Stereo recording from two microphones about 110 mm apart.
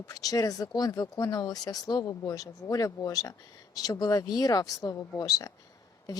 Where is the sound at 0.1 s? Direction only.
35° left (ahead or behind).